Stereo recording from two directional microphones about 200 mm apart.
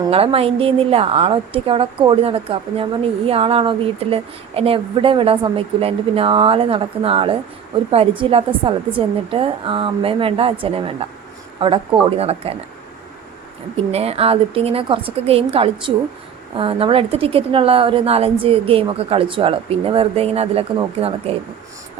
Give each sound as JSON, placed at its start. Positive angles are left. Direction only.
{"t": 0.0, "sound": "a woman's voice", "side_deg": -25}
{"t": 13.7, "sound": "a woman's voice", "side_deg": -30}